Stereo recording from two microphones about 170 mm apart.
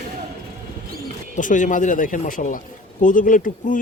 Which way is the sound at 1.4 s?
50° left (ahead or behind).